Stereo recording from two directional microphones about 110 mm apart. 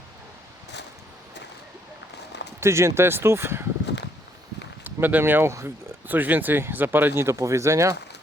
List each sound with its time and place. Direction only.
2.6 s speech: 25° right (ahead or behind)
4.8 s speech: 20° right (ahead or behind)